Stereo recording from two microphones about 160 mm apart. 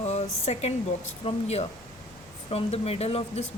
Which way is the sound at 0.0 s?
45° left (ahead or behind).